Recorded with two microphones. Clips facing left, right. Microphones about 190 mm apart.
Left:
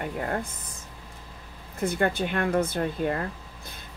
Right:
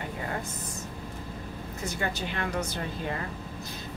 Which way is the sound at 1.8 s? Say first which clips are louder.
Left 8 dB; 55° left (ahead or behind).